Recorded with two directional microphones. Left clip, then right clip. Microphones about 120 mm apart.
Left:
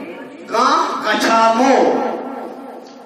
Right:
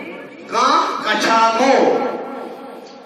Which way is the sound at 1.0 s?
30° left (ahead or behind).